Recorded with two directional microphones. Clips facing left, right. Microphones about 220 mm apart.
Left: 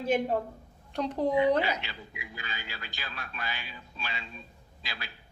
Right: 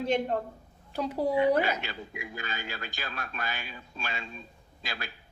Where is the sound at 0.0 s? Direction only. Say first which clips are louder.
Even; 5° left (ahead or behind).